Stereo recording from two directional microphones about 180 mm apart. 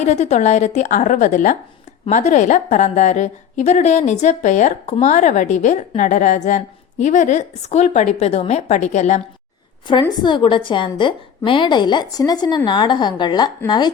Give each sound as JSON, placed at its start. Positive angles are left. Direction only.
{"t": 0.0, "sound": "a woman's voice", "side_deg": 40}
{"t": 9.8, "sound": "a woman's voice", "side_deg": 25}